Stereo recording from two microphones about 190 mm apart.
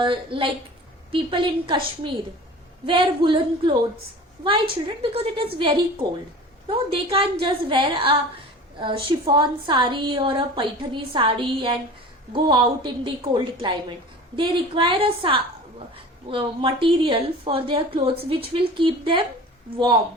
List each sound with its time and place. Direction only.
0.0 s a woman's voice: 25° right (ahead or behind)
5.1 s a woman's voice: 30° right (ahead or behind)